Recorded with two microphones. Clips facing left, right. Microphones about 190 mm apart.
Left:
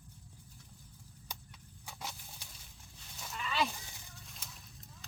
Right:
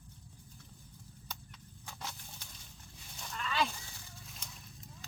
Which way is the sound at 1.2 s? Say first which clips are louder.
Even; 10° left (ahead or behind).